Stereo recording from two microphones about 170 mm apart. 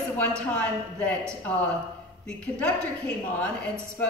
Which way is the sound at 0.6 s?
10° left (ahead or behind).